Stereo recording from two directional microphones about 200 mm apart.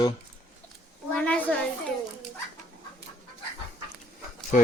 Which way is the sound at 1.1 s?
5° left (ahead or behind).